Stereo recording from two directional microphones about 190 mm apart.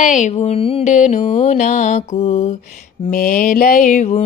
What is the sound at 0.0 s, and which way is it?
Mantra, 40° left (ahead or behind).